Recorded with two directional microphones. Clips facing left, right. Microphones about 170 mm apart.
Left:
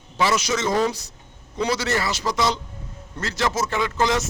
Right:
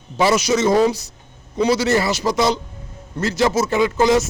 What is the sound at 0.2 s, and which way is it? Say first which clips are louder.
A man's voice: right 6 dB; 10° right (ahead or behind).